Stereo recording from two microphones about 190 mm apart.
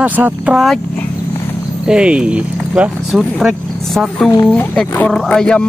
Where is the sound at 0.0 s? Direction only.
10° right (ahead or behind).